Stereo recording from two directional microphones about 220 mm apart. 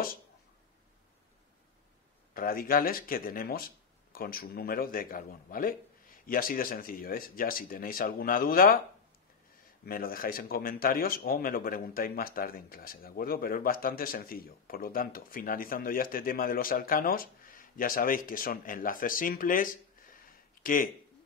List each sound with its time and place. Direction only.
2.3 s speech: 40° left (ahead or behind)
9.8 s speech: 40° left (ahead or behind)